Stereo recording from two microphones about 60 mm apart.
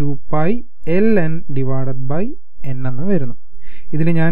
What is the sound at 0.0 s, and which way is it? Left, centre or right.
Speech, right.